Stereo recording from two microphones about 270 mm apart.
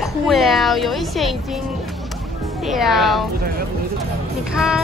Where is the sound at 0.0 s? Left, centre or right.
Centre.